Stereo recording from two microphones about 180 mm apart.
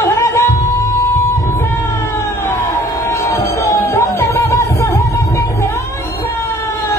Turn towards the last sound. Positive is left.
turn(degrees=15)  # may be behind; listen again after turning